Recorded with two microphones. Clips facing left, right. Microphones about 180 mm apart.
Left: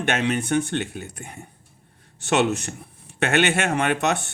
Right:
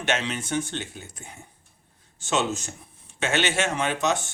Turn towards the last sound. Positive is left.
turn(degrees=60)  # may be behind; listen again after turning